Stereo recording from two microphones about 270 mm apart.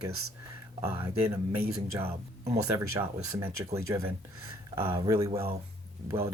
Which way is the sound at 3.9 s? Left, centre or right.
Centre.